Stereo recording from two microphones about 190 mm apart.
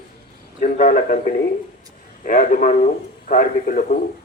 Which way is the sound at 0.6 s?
45° left (ahead or behind).